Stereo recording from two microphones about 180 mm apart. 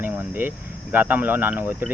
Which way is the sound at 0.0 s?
10° right (ahead or behind).